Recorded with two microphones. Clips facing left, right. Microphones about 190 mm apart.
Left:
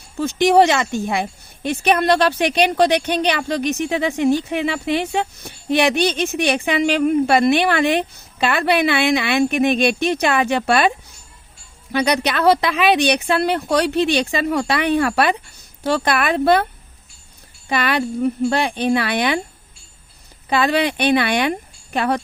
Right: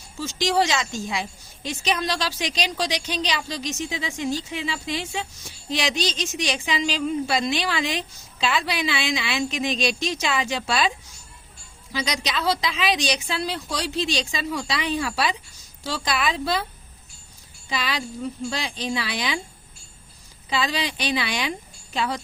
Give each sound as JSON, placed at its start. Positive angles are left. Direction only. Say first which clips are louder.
{"t": 0.2, "sound": "speech", "louder": "left 9 dB", "side_deg": 60}
{"t": 17.7, "sound": "speech", "louder": "left 9 dB", "side_deg": 60}
{"t": 20.5, "sound": "speech", "louder": "left 8 dB", "side_deg": 60}